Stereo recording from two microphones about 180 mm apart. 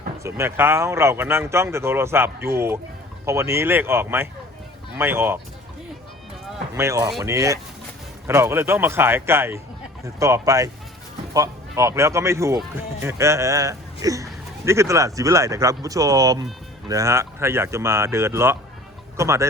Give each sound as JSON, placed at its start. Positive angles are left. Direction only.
{"t": 0.2, "sound": "speech", "side_deg": -15}
{"t": 6.7, "sound": "speech", "side_deg": -15}